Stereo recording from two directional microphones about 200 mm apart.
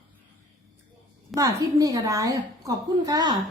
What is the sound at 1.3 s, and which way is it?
A woman's voice, 15° right (ahead or behind).